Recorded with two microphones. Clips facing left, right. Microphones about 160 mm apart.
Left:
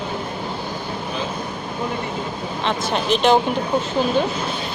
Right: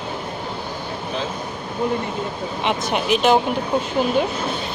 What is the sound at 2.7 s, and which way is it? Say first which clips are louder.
Speech: even; 15° right (ahead or behind).